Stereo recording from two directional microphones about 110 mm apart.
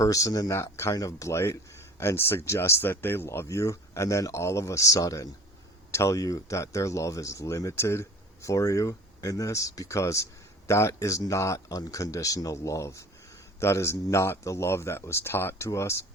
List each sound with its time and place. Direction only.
0.0 s speech: 30° left (ahead or behind)